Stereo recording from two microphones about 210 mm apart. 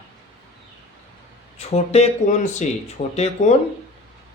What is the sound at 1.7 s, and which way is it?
Speech, 30° left (ahead or behind).